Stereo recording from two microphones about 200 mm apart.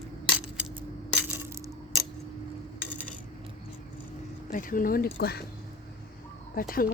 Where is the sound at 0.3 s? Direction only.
10° right (ahead or behind).